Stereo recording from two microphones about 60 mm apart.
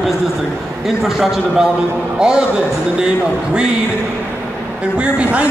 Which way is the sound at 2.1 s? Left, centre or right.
Centre.